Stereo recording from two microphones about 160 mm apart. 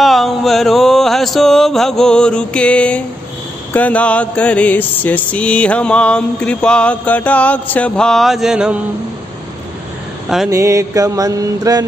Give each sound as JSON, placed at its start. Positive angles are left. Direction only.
{"t": 0.0, "sound": "mantra", "side_deg": 0}
{"t": 10.2, "sound": "a sound", "side_deg": -5}
{"t": 10.5, "sound": "mantra", "side_deg": -20}